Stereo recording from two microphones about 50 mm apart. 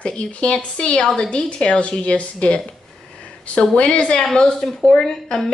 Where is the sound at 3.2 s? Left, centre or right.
Left.